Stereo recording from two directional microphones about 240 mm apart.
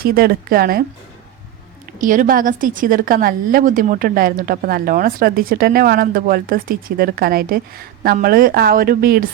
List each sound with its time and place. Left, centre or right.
0.0 s a woman's voice: right
2.0 s a woman's voice: right